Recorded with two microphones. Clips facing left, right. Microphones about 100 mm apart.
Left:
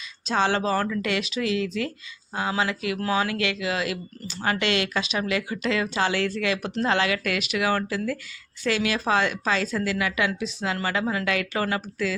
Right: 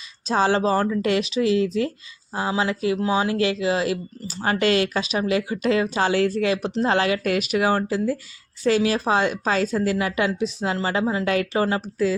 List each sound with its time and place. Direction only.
0.3 s speech: 35° right (ahead or behind)